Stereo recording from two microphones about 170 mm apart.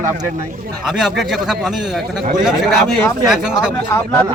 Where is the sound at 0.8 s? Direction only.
5° right (ahead or behind).